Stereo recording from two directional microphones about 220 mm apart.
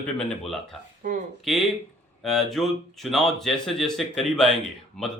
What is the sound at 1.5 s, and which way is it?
A man's voice, centre (ahead or behind).